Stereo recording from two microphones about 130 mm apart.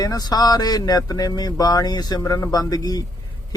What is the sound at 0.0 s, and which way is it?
Speech, 30° left (ahead or behind).